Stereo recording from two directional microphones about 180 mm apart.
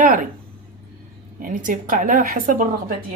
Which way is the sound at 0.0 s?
50° right (ahead or behind).